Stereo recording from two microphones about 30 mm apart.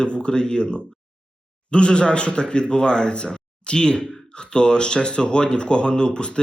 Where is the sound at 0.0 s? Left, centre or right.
Left.